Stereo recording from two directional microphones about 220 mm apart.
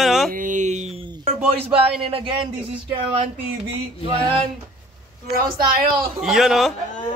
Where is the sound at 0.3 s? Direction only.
35° right (ahead or behind).